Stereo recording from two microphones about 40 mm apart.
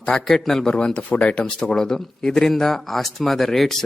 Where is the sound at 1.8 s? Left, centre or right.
Centre.